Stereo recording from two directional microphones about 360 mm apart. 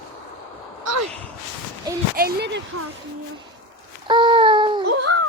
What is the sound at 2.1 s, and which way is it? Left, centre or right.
Speech, right.